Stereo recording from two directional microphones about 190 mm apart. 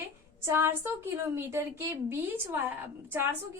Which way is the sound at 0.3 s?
15° right (ahead or behind).